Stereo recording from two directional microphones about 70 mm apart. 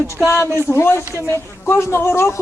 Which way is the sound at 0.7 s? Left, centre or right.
Left.